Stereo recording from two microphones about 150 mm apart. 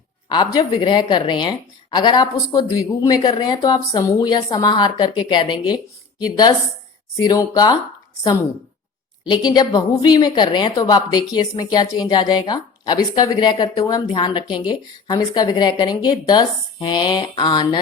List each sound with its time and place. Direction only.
0.3 s speech: 30° left (ahead or behind)
9.2 s speech: 30° left (ahead or behind)